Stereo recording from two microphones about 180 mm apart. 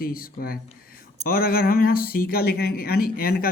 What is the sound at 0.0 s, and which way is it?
Speech, 55° left (ahead or behind).